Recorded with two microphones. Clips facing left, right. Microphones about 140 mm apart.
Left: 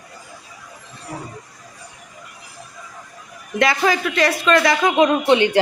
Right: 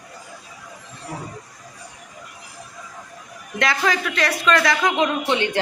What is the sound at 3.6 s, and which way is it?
Speech, 5° left (ahead or behind).